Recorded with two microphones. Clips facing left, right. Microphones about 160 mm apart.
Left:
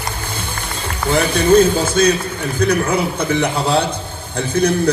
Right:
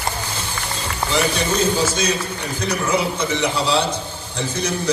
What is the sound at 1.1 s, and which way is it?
A man's voice, 55° left (ahead or behind).